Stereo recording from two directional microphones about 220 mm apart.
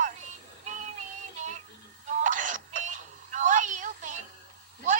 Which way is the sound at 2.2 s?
35° right (ahead or behind).